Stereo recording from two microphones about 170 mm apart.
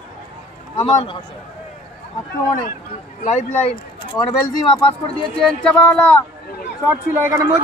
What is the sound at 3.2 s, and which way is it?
Speech, 45° left (ahead or behind).